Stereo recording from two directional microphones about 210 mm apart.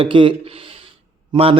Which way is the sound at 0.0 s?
25° right (ahead or behind).